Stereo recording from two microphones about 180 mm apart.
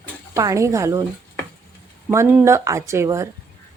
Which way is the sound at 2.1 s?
15° right (ahead or behind).